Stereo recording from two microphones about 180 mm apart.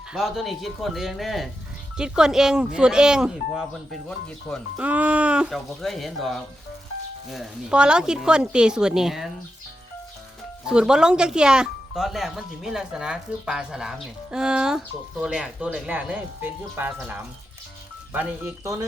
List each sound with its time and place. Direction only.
0.1 s speech: centre (ahead or behind)
4.8 s speech: 10° right (ahead or behind)
10.7 s speech: 5° right (ahead or behind)